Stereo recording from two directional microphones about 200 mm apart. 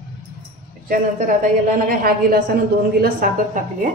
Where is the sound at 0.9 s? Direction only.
45° right (ahead or behind).